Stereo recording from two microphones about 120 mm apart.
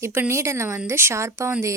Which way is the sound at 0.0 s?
20° right (ahead or behind).